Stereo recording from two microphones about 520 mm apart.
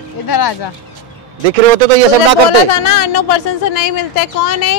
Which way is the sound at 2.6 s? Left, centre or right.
Left.